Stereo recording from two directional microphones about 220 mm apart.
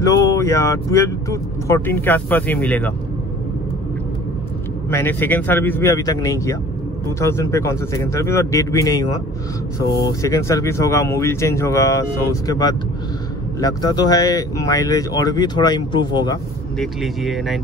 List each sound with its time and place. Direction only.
0.0 s speech: 15° left (ahead or behind)
4.8 s speech: 10° left (ahead or behind)
16.7 s speech: centre (ahead or behind)